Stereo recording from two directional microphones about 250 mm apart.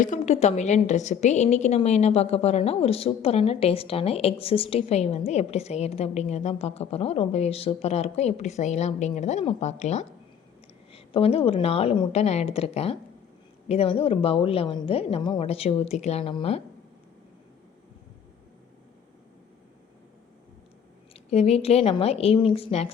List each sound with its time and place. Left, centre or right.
0.0 s a woman's voice: left
21.2 s a woman's voice: left